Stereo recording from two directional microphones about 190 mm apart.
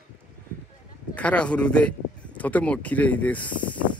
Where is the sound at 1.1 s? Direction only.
5° left (ahead or behind).